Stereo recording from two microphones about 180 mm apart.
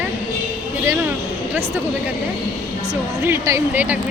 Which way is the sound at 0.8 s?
15° right (ahead or behind).